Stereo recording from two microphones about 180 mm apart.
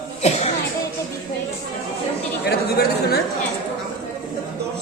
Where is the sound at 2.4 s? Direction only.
60° left (ahead or behind).